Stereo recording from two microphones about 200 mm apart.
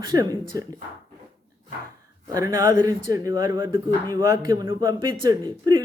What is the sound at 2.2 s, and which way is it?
Speech, 15° right (ahead or behind).